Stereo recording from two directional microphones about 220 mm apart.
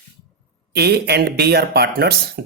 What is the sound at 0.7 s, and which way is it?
Speech, 45° right (ahead or behind).